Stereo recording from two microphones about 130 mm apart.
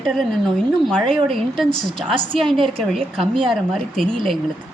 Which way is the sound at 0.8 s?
5° left (ahead or behind).